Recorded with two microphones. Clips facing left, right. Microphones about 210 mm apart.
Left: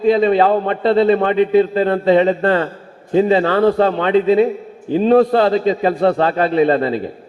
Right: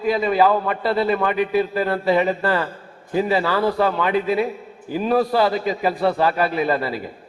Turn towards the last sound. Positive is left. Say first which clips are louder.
# left 7 dB
turn(degrees=25)  # may be behind; listen again after turning